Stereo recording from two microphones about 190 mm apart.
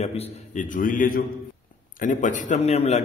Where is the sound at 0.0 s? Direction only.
35° left (ahead or behind).